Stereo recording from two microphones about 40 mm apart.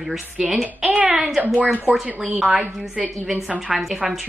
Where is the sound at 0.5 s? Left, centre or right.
Centre.